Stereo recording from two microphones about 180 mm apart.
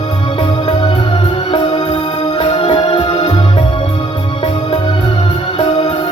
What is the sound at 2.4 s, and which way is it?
Music, 30° left (ahead or behind).